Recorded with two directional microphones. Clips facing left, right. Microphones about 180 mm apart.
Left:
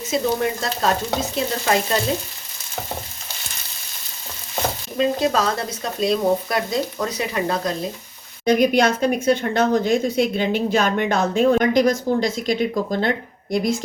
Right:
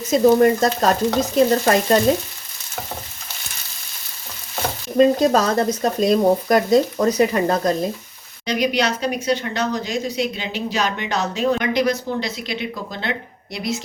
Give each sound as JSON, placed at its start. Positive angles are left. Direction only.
{"t": 0.1, "sound": "speech", "side_deg": -45}
{"t": 4.9, "sound": "speech", "side_deg": -45}
{"t": 8.4, "sound": "speech", "side_deg": 50}